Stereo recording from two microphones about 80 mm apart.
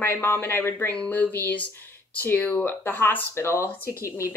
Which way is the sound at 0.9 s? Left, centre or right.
Centre.